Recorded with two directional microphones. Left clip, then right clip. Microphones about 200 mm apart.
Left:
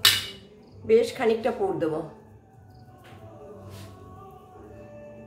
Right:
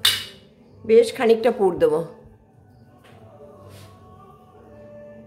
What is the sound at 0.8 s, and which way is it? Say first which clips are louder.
A woman's voice: right 6 dB; 45° right (ahead or behind).